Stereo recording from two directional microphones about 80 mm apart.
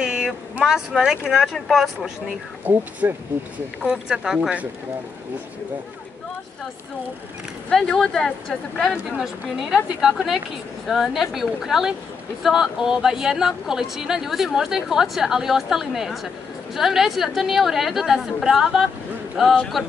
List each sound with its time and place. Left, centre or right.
0.0 s speech: centre
2.2 s speech: right
3.8 s speech: centre
7.7 s speech: centre
9.9 s speech: centre